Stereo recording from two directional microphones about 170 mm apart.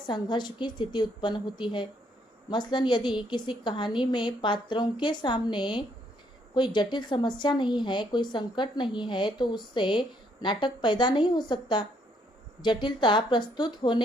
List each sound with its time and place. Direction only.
0.1 s speech: 25° left (ahead or behind)